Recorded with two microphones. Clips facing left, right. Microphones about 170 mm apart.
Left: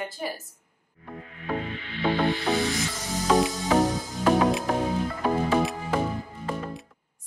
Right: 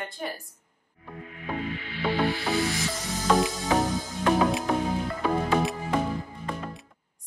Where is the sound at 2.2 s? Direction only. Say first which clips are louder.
Even; 20° left (ahead or behind).